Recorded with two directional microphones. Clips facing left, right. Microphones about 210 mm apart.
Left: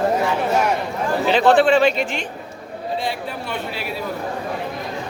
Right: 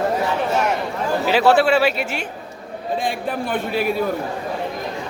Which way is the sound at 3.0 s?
50° right (ahead or behind).